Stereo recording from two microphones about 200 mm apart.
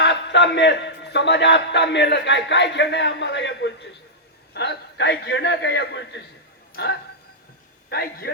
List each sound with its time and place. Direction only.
0.0 s a man's voice: 60° left (ahead or behind)
7.9 s a man's voice: 50° left (ahead or behind)